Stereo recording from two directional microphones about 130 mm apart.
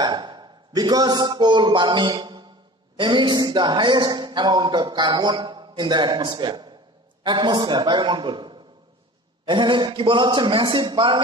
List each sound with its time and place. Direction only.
0.0 s a man's voice: 35° right (ahead or behind)